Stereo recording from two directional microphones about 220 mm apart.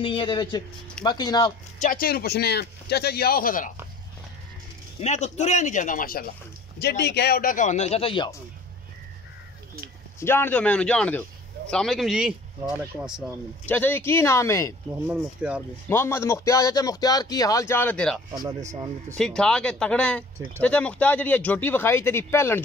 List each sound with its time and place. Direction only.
0.0 s speech: 20° left (ahead or behind)
1.8 s speech: 40° left (ahead or behind)
5.0 s speech: 30° left (ahead or behind)
10.2 s a man's voice: 10° left (ahead or behind)
13.7 s speech: 10° left (ahead or behind)
15.0 s a man's voice: 5° right (ahead or behind)
15.9 s speech: 10° left (ahead or behind)
18.3 s speech: 15° right (ahead or behind)
19.1 s a man's voice: 5° left (ahead or behind)